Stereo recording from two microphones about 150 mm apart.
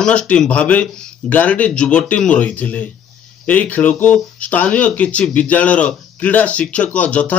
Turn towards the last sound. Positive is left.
turn(degrees=10)  # may be behind; listen again after turning